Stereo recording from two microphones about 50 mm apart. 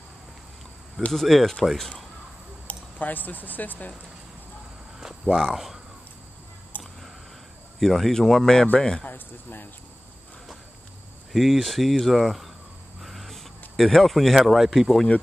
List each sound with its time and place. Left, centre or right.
1.1 s speech: centre
2.6 s speech: left
5.3 s speech: centre
6.7 s a sound: left
7.8 s speech: centre
9.0 s speech: left
11.3 s speech: centre
13.0 s vehicle: centre
13.7 s speech: centre